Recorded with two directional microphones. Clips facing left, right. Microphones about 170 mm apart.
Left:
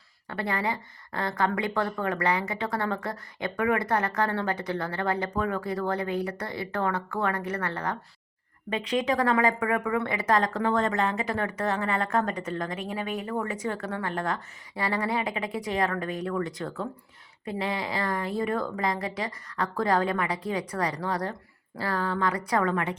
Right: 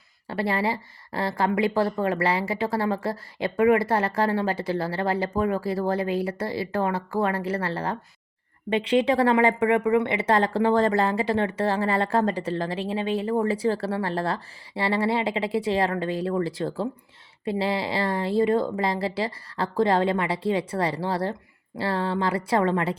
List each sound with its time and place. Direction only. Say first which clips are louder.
0.3 s speech: right 4 dB; 25° right (ahead or behind)